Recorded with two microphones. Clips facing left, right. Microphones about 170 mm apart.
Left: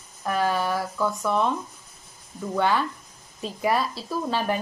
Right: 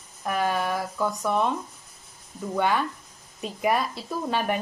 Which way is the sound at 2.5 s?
15° right (ahead or behind).